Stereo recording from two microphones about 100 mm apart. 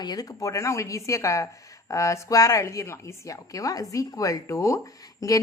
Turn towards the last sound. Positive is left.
turn(degrees=35)  # may be behind; listen again after turning